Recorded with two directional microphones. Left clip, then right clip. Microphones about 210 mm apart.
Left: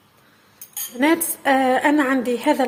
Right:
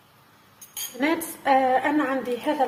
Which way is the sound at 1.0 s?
35° left (ahead or behind).